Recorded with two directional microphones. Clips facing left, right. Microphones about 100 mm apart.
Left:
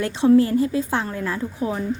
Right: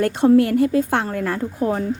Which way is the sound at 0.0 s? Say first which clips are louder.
Right 1 dB; 50° right (ahead or behind).